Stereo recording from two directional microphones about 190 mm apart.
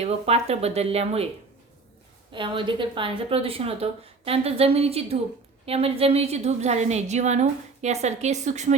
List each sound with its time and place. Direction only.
0.0 s a woman's voice: 35° right (ahead or behind)
2.3 s a woman's voice: 25° right (ahead or behind)